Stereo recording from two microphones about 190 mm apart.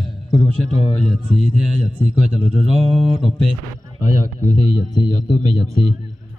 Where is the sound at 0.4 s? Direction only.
35° left (ahead or behind).